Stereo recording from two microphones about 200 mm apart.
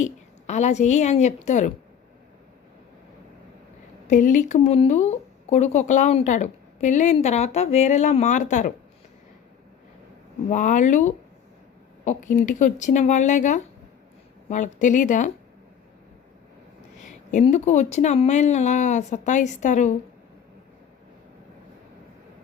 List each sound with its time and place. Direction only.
0.0 s a woman's voice: 35° left (ahead or behind)
4.0 s a woman's voice: 40° left (ahead or behind)
10.5 s a woman's voice: 40° left (ahead or behind)
17.0 s a woman's voice: 35° left (ahead or behind)